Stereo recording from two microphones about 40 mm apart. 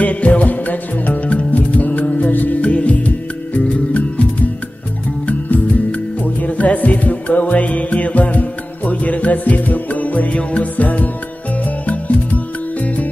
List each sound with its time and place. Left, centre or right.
0.0 s music: left
2.6 s music: left